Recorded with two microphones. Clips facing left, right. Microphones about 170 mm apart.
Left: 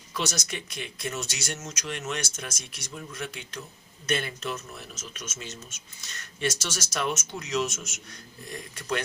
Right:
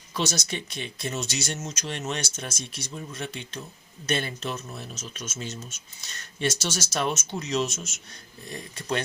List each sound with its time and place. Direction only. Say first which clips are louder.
0.1 s speech: right 3 dB; 25° right (ahead or behind)